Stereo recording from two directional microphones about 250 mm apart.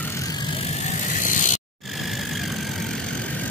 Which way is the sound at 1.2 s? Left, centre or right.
Left.